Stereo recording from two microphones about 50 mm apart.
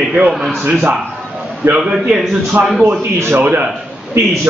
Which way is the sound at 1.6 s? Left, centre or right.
Right.